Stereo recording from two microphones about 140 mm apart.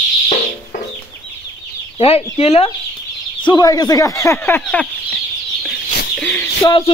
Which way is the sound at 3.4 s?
25° left (ahead or behind).